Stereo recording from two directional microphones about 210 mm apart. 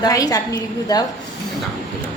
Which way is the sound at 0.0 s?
15° left (ahead or behind).